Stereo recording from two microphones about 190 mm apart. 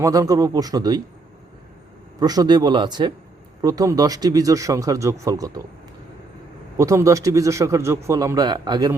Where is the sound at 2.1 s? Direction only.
20° right (ahead or behind).